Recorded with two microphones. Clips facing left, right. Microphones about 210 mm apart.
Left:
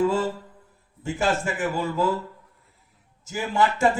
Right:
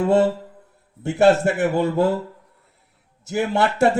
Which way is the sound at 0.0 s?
70° right (ahead or behind).